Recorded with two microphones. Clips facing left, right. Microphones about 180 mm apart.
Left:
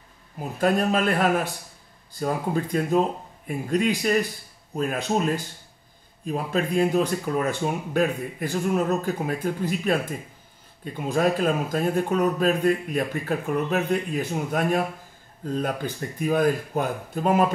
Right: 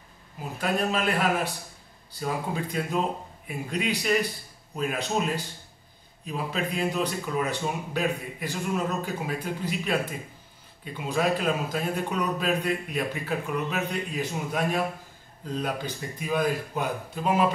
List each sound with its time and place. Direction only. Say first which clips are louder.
0.4 s a man's voice: left 5 dB; 45° left (ahead or behind)